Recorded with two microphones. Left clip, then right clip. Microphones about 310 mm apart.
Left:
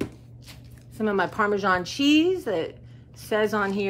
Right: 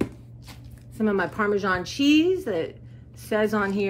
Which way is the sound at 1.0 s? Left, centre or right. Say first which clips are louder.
Left 1 dB; centre.